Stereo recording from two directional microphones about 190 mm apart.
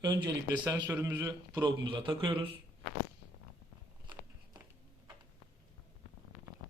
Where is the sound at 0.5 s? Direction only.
10° right (ahead or behind); by 2.6 s 25° right (ahead or behind).